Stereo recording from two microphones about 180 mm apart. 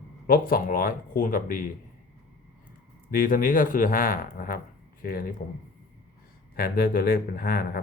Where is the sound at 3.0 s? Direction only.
50° left (ahead or behind).